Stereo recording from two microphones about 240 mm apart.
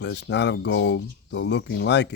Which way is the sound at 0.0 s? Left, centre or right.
Left.